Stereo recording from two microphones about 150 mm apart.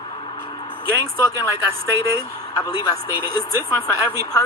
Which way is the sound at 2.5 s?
25° left (ahead or behind).